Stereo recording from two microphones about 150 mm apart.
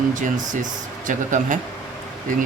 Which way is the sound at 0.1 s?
60° right (ahead or behind).